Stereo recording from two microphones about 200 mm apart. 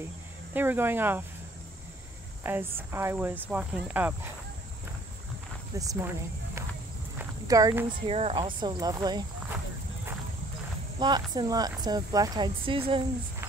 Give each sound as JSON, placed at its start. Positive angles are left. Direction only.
{"t": 0.6, "sound": "speech", "side_deg": -10}
{"t": 2.4, "sound": "speech", "side_deg": -10}
{"t": 5.8, "sound": "speech", "side_deg": -15}
{"t": 7.2, "sound": "walk", "side_deg": -15}
{"t": 8.1, "sound": "speech", "side_deg": -30}
{"t": 11.0, "sound": "speech", "side_deg": -20}